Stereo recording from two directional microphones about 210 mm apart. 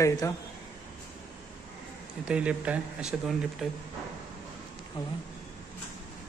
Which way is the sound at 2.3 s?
5° right (ahead or behind).